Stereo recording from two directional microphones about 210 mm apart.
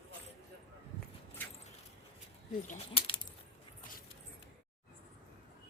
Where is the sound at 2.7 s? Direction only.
25° left (ahead or behind).